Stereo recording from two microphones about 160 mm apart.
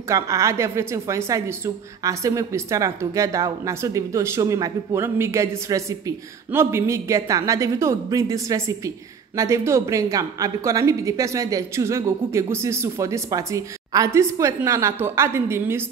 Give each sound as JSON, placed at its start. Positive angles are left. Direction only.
{"t": 0.1, "sound": "speech", "side_deg": -20}